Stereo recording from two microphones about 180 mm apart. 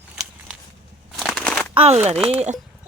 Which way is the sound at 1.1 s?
Centre (ahead or behind).